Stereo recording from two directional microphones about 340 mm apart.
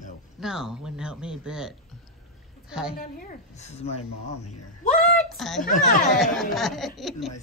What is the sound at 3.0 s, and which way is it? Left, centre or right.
Speech, left.